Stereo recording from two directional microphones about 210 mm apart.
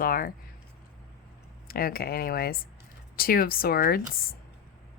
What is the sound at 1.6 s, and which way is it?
Speech, 45° left (ahead or behind).